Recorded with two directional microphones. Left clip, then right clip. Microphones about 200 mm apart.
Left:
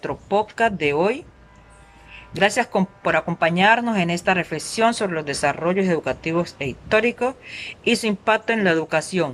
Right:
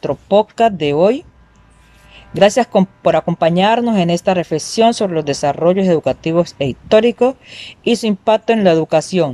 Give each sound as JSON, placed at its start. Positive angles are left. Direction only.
{"t": 0.0, "sound": "speech", "side_deg": -30}
{"t": 2.3, "sound": "speech", "side_deg": -30}